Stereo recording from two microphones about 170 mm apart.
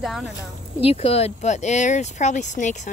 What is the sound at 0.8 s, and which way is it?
Speech, 35° left (ahead or behind).